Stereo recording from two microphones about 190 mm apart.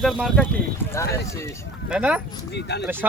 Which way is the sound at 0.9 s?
15° left (ahead or behind).